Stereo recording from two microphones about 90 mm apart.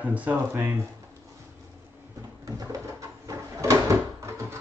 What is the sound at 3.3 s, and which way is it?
Drawer open or close, 35° right (ahead or behind).